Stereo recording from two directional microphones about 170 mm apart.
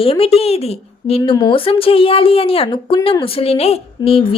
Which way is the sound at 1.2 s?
25° left (ahead or behind).